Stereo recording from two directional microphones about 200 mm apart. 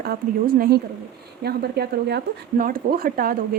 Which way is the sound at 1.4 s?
55° right (ahead or behind).